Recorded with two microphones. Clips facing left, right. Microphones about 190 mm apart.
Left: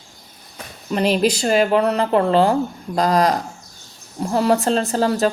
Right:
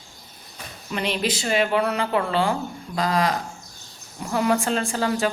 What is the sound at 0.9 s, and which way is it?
A woman's voice, 40° left (ahead or behind).